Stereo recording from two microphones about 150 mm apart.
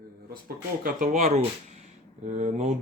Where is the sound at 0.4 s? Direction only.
75° right (ahead or behind).